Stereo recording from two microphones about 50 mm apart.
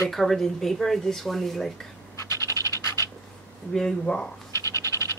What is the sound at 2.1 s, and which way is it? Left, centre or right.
Scratch, left.